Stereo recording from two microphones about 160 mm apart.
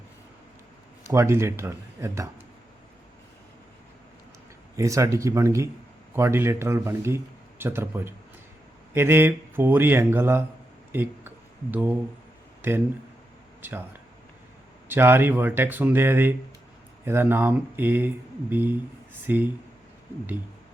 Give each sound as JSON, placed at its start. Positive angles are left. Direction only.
{"t": 1.0, "sound": "speech", "side_deg": -15}
{"t": 4.8, "sound": "speech", "side_deg": -20}
{"t": 13.6, "sound": "speech", "side_deg": -15}
{"t": 14.8, "sound": "speech", "side_deg": -15}